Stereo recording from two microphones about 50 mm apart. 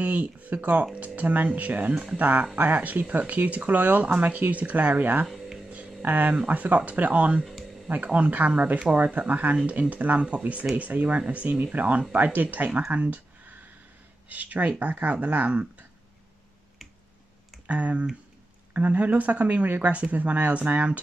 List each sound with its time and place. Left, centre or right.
0.0 s speech: right
14.3 s speech: right
17.6 s speech: right